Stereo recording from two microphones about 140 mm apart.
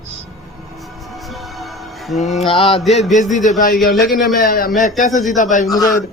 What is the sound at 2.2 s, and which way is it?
Mantra, 55° left (ahead or behind).